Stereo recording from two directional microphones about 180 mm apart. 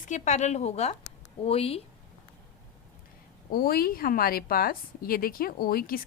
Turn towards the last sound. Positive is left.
turn(degrees=55)  # may be behind; listen again after turning